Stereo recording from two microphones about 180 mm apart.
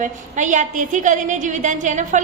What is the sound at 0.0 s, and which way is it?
A woman's voice, 45° right (ahead or behind).